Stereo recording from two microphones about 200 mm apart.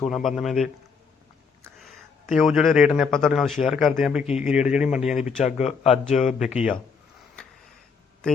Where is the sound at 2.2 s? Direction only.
Centre (ahead or behind).